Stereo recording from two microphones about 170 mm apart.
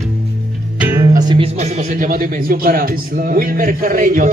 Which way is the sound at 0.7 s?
10° right (ahead or behind).